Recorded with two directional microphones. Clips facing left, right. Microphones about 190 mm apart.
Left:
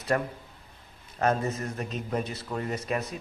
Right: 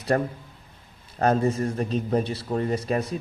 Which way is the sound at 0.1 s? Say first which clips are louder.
Right 2 dB; 35° right (ahead or behind).